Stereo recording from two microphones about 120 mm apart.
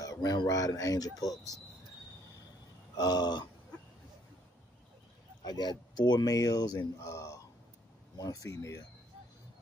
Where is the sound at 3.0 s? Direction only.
35° left (ahead or behind).